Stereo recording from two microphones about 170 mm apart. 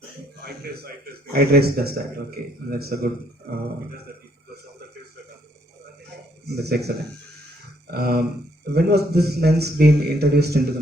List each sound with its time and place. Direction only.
0.4 s a sound: 65° right (ahead or behind)
1.3 s a man's voice: 65° right (ahead or behind)
6.6 s a man's voice: 75° right (ahead or behind)